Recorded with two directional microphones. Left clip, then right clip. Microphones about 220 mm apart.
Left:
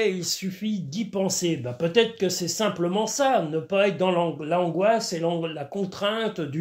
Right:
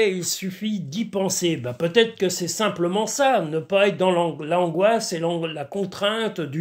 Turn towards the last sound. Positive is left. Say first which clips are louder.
# right 3 dB
turn(degrees=-20)  # may be behind; listen again after turning